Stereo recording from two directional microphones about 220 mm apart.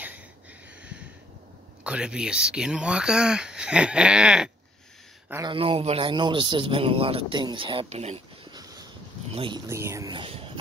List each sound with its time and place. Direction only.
1.9 s speech: 5° right (ahead or behind)
5.3 s a man's voice: 20° right (ahead or behind)
8.5 s a sound: 15° right (ahead or behind)
9.3 s speech: 25° right (ahead or behind)
9.7 s a man's voice: 10° right (ahead or behind)